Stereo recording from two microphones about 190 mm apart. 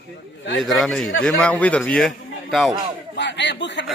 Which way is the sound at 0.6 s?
Centre (ahead or behind).